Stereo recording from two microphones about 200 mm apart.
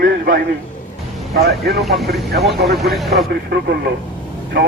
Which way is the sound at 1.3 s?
50° right (ahead or behind).